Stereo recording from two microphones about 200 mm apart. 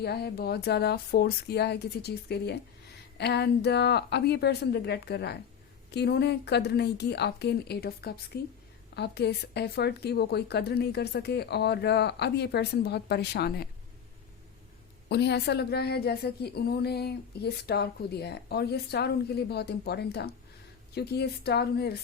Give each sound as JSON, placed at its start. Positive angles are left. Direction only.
{"t": 0.0, "sound": "a woman's voice", "side_deg": 55}
{"t": 15.1, "sound": "a woman's voice", "side_deg": 55}